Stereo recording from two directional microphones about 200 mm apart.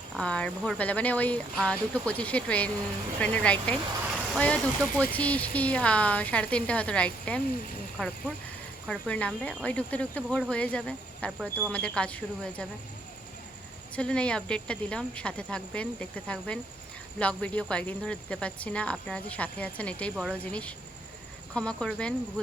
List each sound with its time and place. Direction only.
0.2 s a woman's voice: 5° left (ahead or behind)
13.9 s a woman's voice: 5° left (ahead or behind)